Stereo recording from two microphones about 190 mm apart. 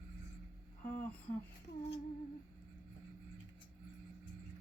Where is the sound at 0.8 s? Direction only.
10° left (ahead or behind).